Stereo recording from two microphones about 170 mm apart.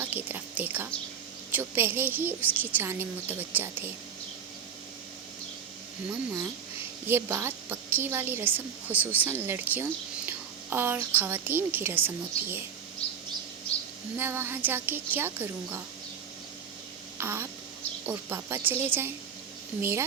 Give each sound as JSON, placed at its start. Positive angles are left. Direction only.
{"t": 0.0, "sound": "a woman's voice", "side_deg": -10}
{"t": 6.1, "sound": "a woman's voice", "side_deg": -15}
{"t": 14.2, "sound": "a woman's voice", "side_deg": -15}
{"t": 17.2, "sound": "a woman's voice", "side_deg": -15}